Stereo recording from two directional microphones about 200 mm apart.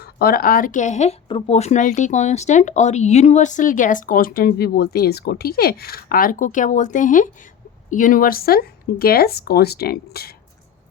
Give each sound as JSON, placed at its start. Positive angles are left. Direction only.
{"t": 0.0, "sound": "a woman's voice", "side_deg": 50}